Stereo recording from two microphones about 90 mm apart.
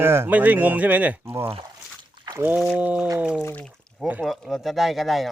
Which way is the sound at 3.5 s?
10° left (ahead or behind).